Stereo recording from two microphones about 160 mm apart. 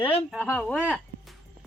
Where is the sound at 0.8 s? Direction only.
5° right (ahead or behind).